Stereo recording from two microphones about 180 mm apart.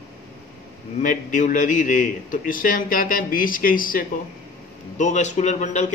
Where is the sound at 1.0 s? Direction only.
45° left (ahead or behind).